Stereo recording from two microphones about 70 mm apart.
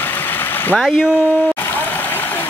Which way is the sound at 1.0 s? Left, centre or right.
Left.